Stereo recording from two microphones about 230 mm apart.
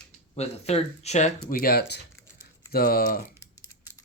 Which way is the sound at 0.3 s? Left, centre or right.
Left.